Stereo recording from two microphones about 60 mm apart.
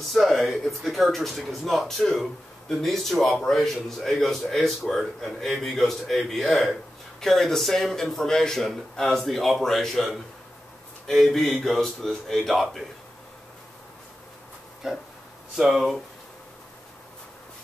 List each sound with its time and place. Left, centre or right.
0.1 s a man's voice: centre
11.1 s a man's voice: centre
14.8 s a man's voice: centre